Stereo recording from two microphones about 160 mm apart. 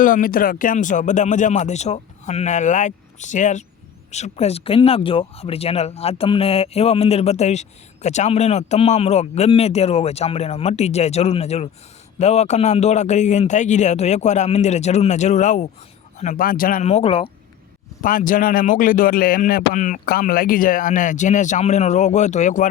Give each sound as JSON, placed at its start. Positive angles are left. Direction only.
{"t": 0.0, "sound": "a man's voice", "side_deg": 60}
{"t": 16.8, "sound": "speech", "side_deg": 40}
{"t": 18.0, "sound": "a man's voice", "side_deg": 60}